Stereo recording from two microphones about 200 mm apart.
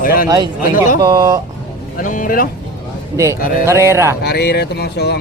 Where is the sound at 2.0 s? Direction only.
40° left (ahead or behind).